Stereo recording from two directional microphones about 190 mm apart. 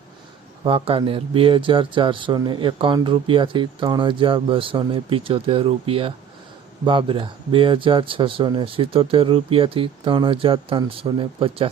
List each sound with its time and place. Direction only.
0.6 s speech: 30° right (ahead or behind)